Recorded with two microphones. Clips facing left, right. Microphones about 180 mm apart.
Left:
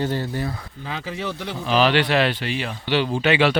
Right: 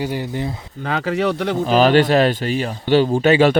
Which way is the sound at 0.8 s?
65° right (ahead or behind).